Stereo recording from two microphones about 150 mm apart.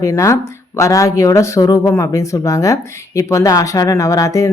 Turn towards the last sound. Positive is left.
turn(degrees=20)  # may be behind; listen again after turning